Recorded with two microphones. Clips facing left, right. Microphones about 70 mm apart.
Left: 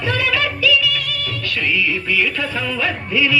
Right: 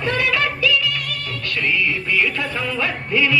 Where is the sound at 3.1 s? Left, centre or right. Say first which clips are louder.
Even; right.